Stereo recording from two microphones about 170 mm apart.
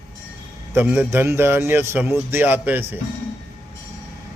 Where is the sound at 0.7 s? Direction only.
10° right (ahead or behind).